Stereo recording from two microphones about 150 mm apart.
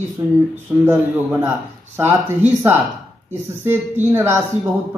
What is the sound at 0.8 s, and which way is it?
Speech, 15° right (ahead or behind).